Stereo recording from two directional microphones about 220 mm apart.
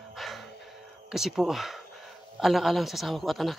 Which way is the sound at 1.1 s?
Centre (ahead or behind).